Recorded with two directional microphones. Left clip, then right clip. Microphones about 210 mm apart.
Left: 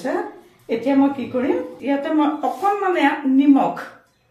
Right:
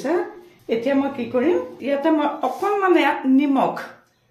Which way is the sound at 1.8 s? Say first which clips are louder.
Even; 55° right (ahead or behind).